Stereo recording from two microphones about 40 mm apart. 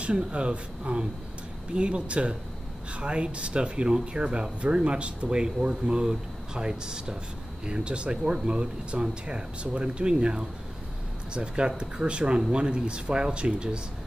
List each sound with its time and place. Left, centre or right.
0.0 s speech: right